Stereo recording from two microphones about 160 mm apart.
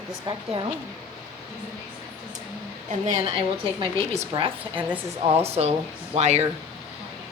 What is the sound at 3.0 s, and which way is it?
A woman's voice, 25° right (ahead or behind).